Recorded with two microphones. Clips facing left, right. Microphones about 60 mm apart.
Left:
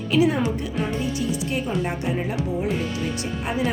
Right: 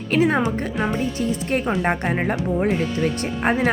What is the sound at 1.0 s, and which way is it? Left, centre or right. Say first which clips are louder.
Speech: right 2 dB; right.